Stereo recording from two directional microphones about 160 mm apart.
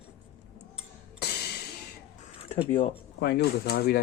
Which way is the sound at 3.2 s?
90° left.